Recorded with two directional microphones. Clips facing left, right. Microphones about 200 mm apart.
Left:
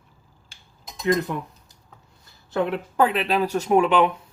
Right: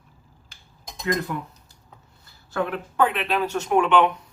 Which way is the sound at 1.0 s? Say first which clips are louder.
Left 4 dB; 20° left (ahead or behind).